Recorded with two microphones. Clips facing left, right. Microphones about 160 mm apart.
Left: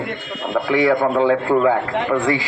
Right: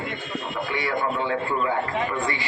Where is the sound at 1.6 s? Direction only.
70° left (ahead or behind).